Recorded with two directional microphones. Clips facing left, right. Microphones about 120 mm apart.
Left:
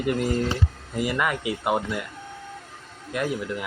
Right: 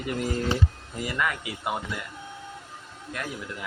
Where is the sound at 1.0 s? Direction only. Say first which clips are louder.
Left 4 dB; 15° left (ahead or behind).